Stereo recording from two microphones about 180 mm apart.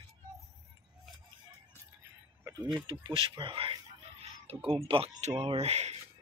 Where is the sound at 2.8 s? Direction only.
30° right (ahead or behind).